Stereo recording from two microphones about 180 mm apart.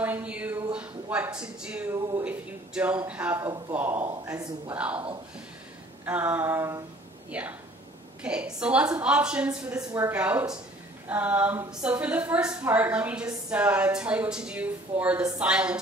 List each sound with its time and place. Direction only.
0.0 s a sound: 10° right (ahead or behind)
0.7 s a man's voice: 10° right (ahead or behind)
4.1 s speech: 20° right (ahead or behind)
4.7 s a woman's voice: 5° right (ahead or behind)
6.0 s a woman's voice: 10° right (ahead or behind)
9.8 s speech: 20° right (ahead or behind)
10.1 s a woman's voice: 10° right (ahead or behind)